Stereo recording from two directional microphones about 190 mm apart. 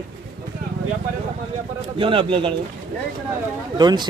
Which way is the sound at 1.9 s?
25° right (ahead or behind).